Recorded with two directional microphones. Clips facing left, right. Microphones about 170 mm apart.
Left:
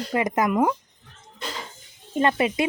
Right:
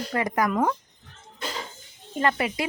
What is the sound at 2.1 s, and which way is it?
Speech, 20° left (ahead or behind).